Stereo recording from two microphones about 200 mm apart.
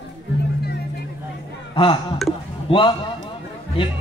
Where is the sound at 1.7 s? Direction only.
25° left (ahead or behind).